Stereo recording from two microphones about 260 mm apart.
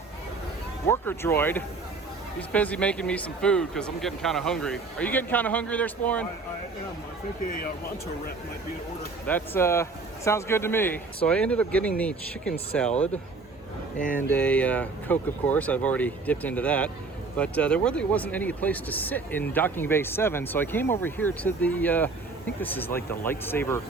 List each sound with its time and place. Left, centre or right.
0.9 s speech: centre
9.2 s speech: centre
14.0 s speech: left
14.3 s speech: centre